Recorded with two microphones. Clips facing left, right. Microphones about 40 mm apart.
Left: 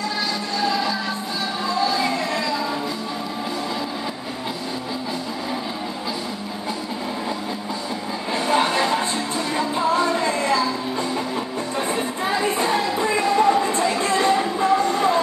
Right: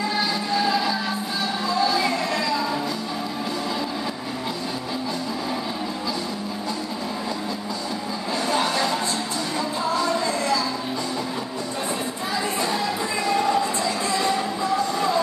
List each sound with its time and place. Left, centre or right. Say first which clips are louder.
0.6 s music: left 1 dB; centre
8.5 s a sound: left 4 dB; left
9.6 s music: left 4 dB; left
12.3 s music: left 4 dB; left
13.0 s a sound: left 6 dB; left
14.7 s music: left 4 dB; left